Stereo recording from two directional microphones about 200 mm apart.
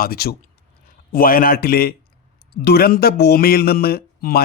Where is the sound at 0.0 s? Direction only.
50° left (ahead or behind).